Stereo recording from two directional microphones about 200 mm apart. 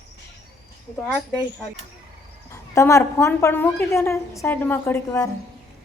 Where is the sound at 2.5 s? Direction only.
15° left (ahead or behind).